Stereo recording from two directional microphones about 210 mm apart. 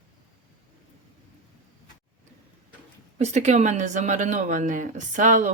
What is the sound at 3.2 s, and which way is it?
Speech, 35° right (ahead or behind).